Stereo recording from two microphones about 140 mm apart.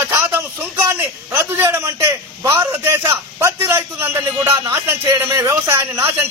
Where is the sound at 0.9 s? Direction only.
15° right (ahead or behind).